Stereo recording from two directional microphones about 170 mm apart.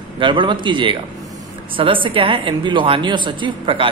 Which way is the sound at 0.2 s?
30° right (ahead or behind).